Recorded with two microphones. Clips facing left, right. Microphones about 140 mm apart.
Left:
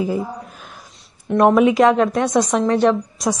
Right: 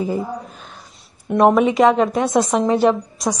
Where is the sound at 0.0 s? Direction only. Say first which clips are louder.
Even; centre (ahead or behind).